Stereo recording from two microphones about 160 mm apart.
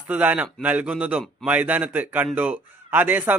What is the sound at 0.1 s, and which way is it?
A man's voice, 10° right (ahead or behind).